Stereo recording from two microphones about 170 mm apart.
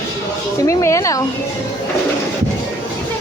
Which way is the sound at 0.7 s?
20° left (ahead or behind).